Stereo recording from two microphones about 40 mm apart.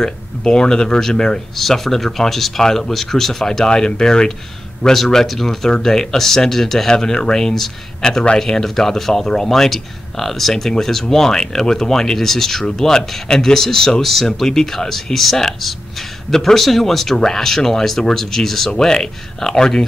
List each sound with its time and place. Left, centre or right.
0.0 s speech: left
1.6 s speech: centre
4.9 s speech: centre